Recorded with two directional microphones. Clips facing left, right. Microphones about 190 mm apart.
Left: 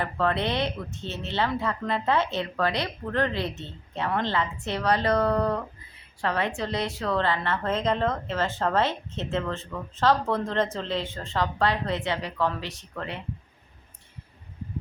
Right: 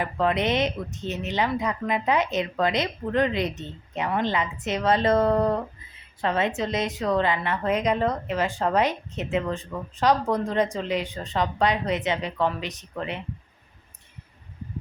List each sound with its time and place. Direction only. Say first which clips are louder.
0.0 s a woman's voice: right 2 dB; 15° right (ahead or behind)